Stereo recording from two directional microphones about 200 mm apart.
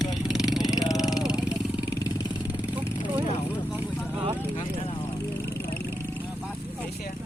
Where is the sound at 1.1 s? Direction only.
20° left (ahead or behind).